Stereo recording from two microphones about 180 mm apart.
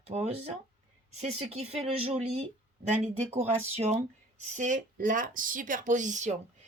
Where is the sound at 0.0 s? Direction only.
35° right (ahead or behind).